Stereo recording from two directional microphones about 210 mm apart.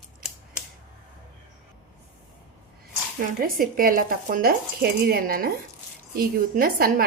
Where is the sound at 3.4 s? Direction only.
45° right (ahead or behind).